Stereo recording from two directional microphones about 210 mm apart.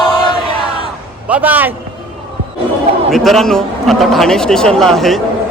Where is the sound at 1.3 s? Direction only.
10° right (ahead or behind).